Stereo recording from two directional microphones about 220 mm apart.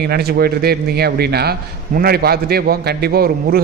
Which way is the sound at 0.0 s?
45° right (ahead or behind).